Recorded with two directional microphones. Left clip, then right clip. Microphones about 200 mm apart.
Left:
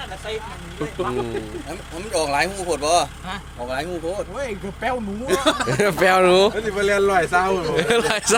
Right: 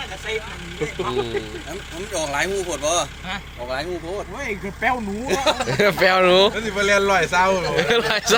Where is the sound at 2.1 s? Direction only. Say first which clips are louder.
Left 2 dB; 45° left (ahead or behind).